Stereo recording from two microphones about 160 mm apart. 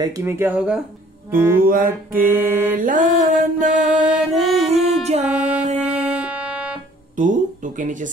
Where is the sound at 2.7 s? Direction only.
55° right (ahead or behind).